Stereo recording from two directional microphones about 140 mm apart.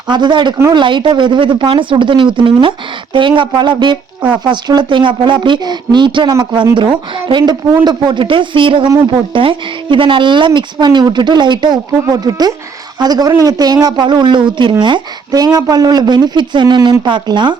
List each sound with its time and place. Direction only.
0.1 s speech: 35° right (ahead or behind)
0.5 s speech: 20° right (ahead or behind)
0.8 s speech: 35° right (ahead or behind)